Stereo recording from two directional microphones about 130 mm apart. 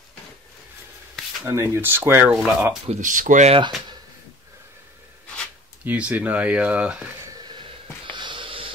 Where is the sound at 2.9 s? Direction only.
85° right.